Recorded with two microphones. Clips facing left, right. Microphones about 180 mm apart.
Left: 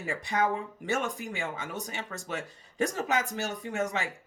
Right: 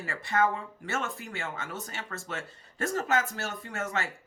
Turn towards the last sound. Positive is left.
turn(degrees=15)  # may be behind; listen again after turning